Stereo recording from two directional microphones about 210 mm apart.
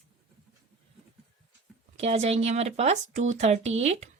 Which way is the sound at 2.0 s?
30° right (ahead or behind).